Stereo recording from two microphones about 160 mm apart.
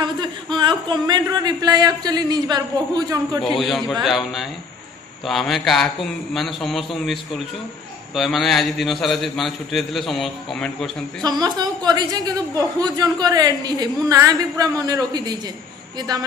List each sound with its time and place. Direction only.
0.0 s speech: 30° right (ahead or behind)
3.5 s a man's voice: centre (ahead or behind)
11.2 s a woman's voice: 25° right (ahead or behind)